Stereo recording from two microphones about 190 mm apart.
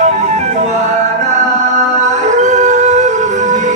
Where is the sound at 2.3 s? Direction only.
40° right (ahead or behind).